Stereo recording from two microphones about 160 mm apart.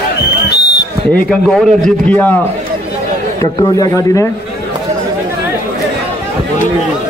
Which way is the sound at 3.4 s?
20° left (ahead or behind).